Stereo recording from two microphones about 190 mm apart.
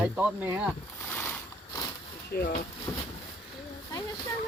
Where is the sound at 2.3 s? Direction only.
50° left (ahead or behind).